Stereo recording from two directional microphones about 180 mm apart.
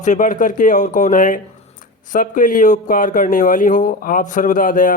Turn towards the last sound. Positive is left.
turn(degrees=50)  # may be behind; listen again after turning